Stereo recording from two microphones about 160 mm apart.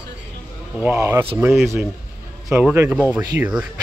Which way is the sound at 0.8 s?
15° right (ahead or behind).